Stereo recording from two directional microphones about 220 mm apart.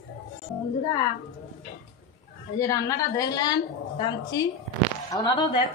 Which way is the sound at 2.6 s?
15° left (ahead or behind).